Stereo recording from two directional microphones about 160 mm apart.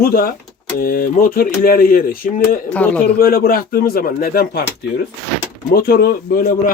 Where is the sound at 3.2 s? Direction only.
70° left (ahead or behind).